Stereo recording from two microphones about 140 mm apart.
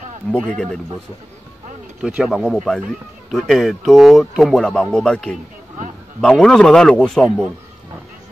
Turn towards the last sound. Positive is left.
turn(degrees=5)  # may be behind; listen again after turning